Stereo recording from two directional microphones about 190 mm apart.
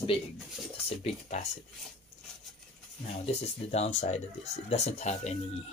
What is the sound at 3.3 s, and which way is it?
Speech, 35° left (ahead or behind).